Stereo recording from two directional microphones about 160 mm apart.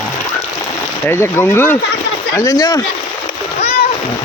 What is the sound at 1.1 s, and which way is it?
Speech, 15° left (ahead or behind).